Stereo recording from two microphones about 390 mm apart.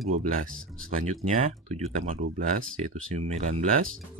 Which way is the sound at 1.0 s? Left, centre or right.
Centre.